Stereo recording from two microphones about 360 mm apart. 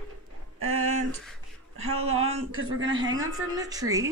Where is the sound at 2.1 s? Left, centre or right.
Centre.